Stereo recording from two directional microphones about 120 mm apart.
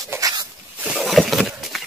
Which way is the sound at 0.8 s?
10° right (ahead or behind).